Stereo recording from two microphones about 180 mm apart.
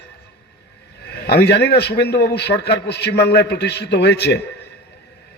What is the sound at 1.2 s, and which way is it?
A man's voice, 65° left (ahead or behind).